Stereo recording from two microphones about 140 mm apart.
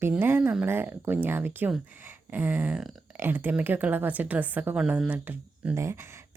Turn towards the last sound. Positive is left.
turn(degrees=-20)  # may be behind; listen again after turning